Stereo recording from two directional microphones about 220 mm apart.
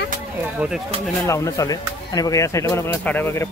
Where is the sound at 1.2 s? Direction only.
15° left (ahead or behind).